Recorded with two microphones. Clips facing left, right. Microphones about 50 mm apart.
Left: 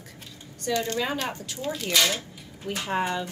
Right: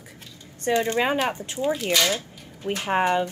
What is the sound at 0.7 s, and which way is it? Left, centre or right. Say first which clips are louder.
A woman's voice: right 5 dB; right.